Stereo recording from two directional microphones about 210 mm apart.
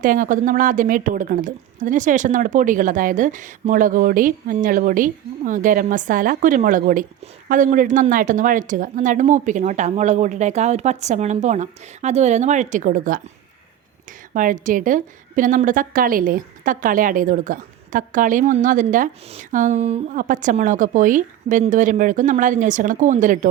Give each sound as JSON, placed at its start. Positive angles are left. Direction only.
{"t": 0.0, "sound": "a woman's voice", "side_deg": -40}
{"t": 14.3, "sound": "a woman's voice", "side_deg": -40}